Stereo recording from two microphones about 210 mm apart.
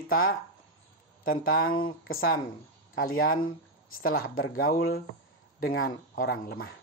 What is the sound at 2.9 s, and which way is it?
Speech, 45° left (ahead or behind).